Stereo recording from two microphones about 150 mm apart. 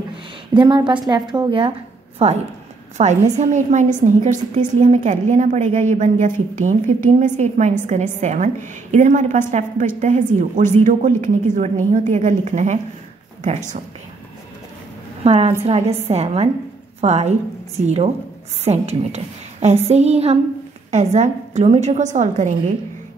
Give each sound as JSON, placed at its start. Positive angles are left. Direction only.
{"t": 0.6, "sound": "a woman's voice", "side_deg": -30}
{"t": 2.2, "sound": "a woman's voice", "side_deg": -45}
{"t": 3.3, "sound": "a woman's voice", "side_deg": -55}
{"t": 15.2, "sound": "a woman's voice", "side_deg": -45}